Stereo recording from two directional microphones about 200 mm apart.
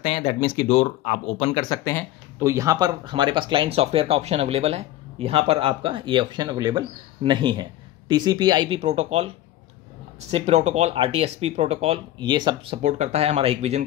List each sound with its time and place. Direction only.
0.0 s speech: 30° left (ahead or behind)
2.3 s speech: 15° right (ahead or behind); by 9.3 s 35° right (ahead or behind)
10.3 s speech: 35° right (ahead or behind)